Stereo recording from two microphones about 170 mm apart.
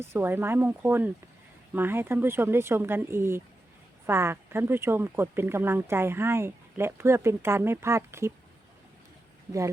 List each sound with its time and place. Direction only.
0.0 s speech: 15° right (ahead or behind)
9.5 s speech: 20° right (ahead or behind)